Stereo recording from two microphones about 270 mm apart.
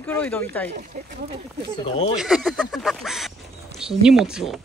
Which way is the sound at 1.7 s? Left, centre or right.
Centre.